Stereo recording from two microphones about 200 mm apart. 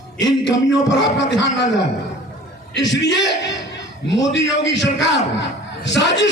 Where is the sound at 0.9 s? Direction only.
65° left (ahead or behind).